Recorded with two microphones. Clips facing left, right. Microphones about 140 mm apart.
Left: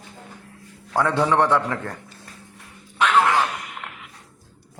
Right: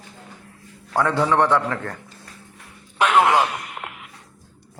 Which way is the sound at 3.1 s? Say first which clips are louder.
Right 2 dB; 20° right (ahead or behind).